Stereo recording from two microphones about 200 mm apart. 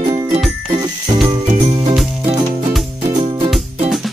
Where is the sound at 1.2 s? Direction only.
35° right (ahead or behind).